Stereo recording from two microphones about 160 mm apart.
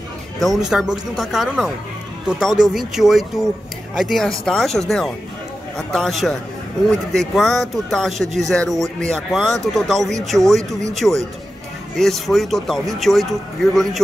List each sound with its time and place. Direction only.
0.4 s speech: centre (ahead or behind)